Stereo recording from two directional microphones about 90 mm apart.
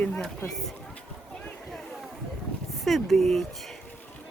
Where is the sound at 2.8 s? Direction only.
Centre (ahead or behind).